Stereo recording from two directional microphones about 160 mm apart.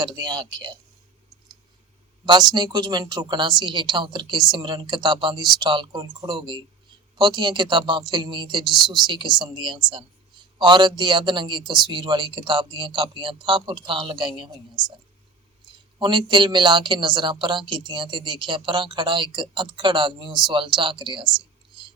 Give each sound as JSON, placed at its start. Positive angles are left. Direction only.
{"t": 0.0, "sound": "a woman's voice", "side_deg": -25}
{"t": 2.2, "sound": "a woman's voice", "side_deg": -25}
{"t": 15.6, "sound": "a woman's voice", "side_deg": -30}